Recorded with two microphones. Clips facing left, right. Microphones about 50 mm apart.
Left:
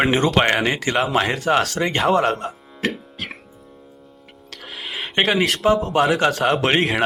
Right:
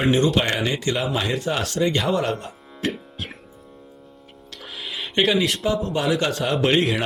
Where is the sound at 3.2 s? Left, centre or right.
Left.